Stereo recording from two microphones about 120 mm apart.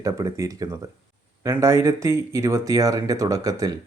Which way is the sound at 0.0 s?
25° right (ahead or behind).